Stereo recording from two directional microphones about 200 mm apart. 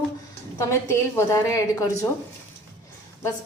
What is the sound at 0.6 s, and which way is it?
A woman's voice, 15° left (ahead or behind).